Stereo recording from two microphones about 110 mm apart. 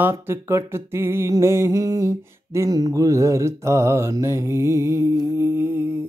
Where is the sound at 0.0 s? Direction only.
20° right (ahead or behind).